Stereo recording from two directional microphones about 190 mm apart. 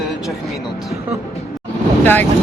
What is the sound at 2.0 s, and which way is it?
Speech, 10° left (ahead or behind).